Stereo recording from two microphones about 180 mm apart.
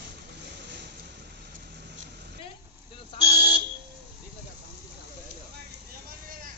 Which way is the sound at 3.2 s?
30° right (ahead or behind).